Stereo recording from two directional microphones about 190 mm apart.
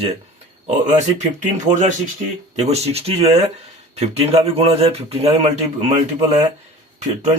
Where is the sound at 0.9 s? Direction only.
35° right (ahead or behind).